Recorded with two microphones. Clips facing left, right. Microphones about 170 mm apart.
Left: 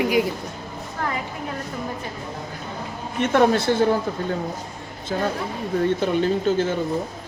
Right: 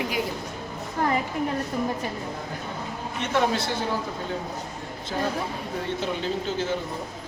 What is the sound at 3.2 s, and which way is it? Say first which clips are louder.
Speech: left 7 dB; 50° left (ahead or behind).